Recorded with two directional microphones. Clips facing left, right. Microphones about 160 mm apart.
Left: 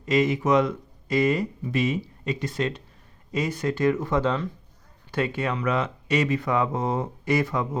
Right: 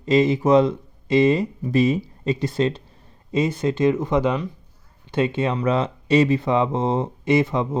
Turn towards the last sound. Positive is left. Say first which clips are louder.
# right 5 dB
turn(degrees=-25)  # may be behind; listen again after turning